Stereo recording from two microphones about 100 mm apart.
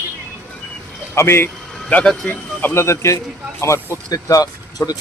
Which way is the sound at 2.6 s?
25° left (ahead or behind).